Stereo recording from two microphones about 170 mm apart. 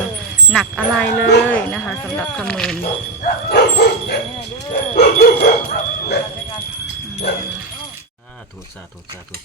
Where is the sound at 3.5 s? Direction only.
70° left (ahead or behind).